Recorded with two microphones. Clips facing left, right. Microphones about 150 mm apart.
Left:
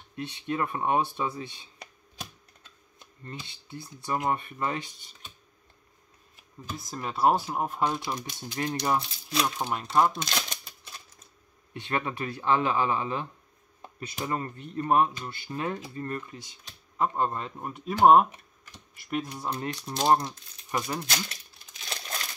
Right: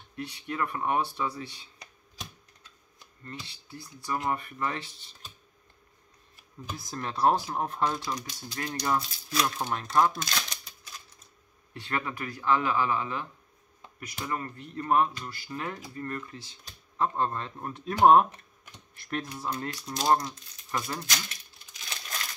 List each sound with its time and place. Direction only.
0.1 s speech: 25° left (ahead or behind)
3.3 s speech: 20° left (ahead or behind)
6.9 s speech: 5° left (ahead or behind); by 9.7 s 25° left (ahead or behind)
9.7 s speech: 10° left (ahead or behind)
10.1 s shuffling cards: 25° left (ahead or behind)
11.7 s speech: 25° left (ahead or behind)